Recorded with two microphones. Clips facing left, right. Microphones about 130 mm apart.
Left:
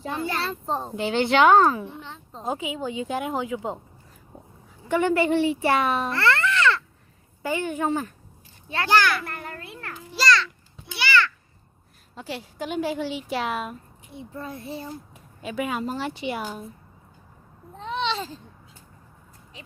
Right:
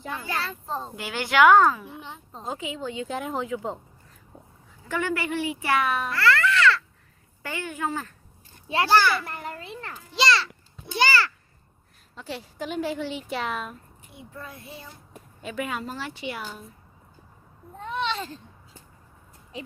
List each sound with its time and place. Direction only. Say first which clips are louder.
0.0 s a child's voice: left 3 dB; 25° left (ahead or behind)
2.0 s a sound: even; 15° right (ahead or behind)
2.4 s a woman's voice: left 4 dB; 15° left (ahead or behind)
4.9 s a child's voice: left 7 dB; 20° left (ahead or behind)
8.8 s a child's voice: right 1 dB; 10° right (ahead or behind)
9.1 s a woman's voice: right 1 dB; centre (ahead or behind)
9.6 s a sound: right 1 dB; 15° right (ahead or behind)
10.3 s babbling: left 2 dB; 40° right (ahead or behind)
12.1 s a woman's voice: left 2 dB; 5° left (ahead or behind)
14.2 s a child's voice: left 6 dB; 30° left (ahead or behind)
15.4 s a woman's voice: left 3 dB; 10° left (ahead or behind)